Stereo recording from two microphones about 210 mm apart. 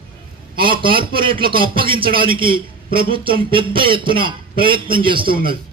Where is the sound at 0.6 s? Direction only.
25° right (ahead or behind).